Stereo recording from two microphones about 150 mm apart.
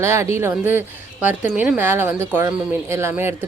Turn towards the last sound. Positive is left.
turn(degrees=-15)  # may be behind; listen again after turning